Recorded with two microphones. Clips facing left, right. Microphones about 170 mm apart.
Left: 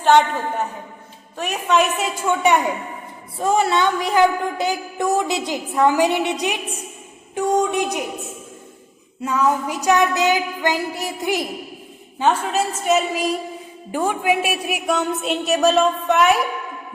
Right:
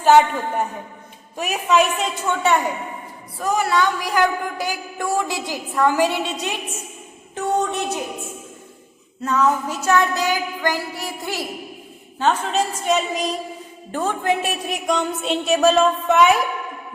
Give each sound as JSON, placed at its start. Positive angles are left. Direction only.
{"t": 0.0, "sound": "a woman's voice", "side_deg": -10}
{"t": 1.4, "sound": "a woman's voice", "side_deg": -5}
{"t": 3.3, "sound": "a woman's voice", "side_deg": 25}
{"t": 7.3, "sound": "a sound", "side_deg": 10}
{"t": 9.2, "sound": "a sound", "side_deg": 10}
{"t": 13.9, "sound": "a woman's voice", "side_deg": 10}